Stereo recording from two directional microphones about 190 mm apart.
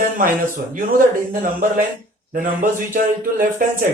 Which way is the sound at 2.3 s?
45° right (ahead or behind).